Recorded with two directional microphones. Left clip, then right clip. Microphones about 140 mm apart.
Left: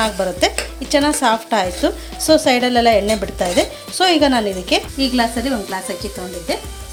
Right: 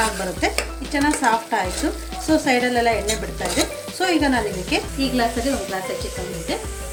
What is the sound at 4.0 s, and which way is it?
Speech, 55° left (ahead or behind).